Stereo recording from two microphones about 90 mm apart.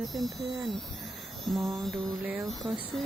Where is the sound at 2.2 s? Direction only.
10° right (ahead or behind).